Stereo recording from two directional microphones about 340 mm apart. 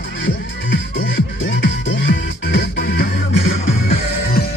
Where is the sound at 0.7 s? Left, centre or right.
Left.